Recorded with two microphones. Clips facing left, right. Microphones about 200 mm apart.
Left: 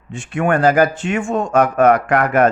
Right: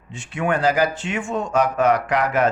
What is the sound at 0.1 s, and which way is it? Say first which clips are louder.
Speech: left 5 dB; 50° left (ahead or behind).